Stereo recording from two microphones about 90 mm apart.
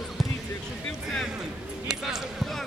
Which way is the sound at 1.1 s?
5° right (ahead or behind).